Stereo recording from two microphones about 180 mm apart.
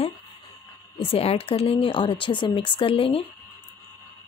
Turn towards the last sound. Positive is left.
turn(degrees=30)  # may be behind; listen again after turning